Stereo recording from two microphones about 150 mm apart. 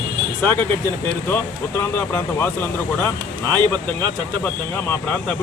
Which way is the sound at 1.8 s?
15° left (ahead or behind).